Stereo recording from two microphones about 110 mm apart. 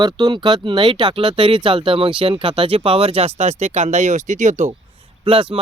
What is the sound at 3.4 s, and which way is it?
Speech, 90° right.